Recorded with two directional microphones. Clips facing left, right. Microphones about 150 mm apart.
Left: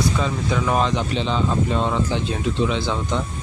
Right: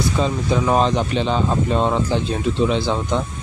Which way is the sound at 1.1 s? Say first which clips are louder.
Right 2 dB; 50° right (ahead or behind).